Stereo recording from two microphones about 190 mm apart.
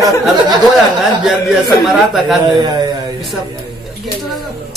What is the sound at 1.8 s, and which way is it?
Speech, centre (ahead or behind).